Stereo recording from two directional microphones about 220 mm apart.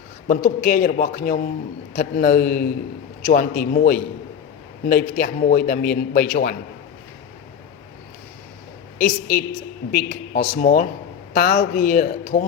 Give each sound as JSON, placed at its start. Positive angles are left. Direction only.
{"t": 0.3, "sound": "a man's voice", "side_deg": 40}
{"t": 9.0, "sound": "a man's voice", "side_deg": 40}